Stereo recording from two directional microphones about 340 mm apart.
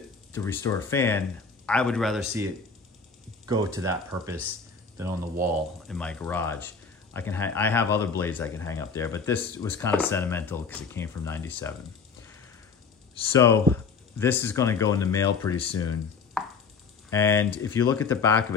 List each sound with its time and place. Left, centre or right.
0.3 s speech: centre
5.9 s speech: centre
13.1 s speech: centre
16.4 s a sound: centre
17.1 s speech: centre